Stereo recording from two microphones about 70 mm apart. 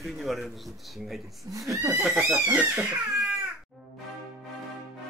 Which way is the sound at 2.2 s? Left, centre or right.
Right.